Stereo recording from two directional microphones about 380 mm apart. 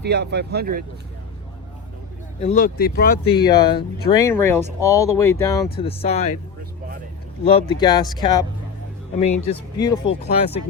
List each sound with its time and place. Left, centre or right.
0.0 s speech: right
2.4 s speech: centre
3.3 s speech: centre
7.4 s speech: centre
9.2 s speech: left
9.7 s speech: centre